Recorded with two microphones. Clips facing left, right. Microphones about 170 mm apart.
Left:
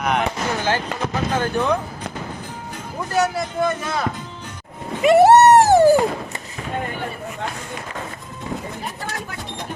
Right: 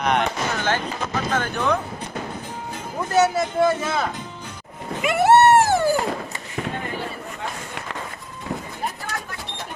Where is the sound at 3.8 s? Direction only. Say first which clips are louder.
Even; centre (ahead or behind).